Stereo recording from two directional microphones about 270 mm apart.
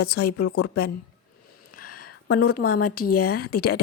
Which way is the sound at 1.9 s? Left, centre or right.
Left.